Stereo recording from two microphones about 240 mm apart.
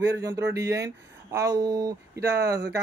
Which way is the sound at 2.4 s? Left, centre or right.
Right.